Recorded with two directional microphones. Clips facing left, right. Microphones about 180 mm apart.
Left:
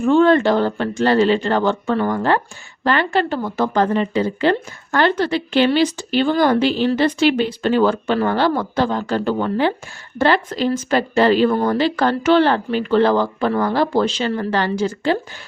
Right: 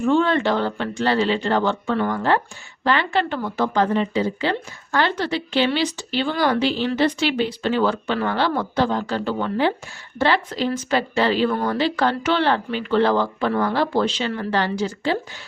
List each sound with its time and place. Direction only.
0.0 s a woman's voice: 50° left (ahead or behind)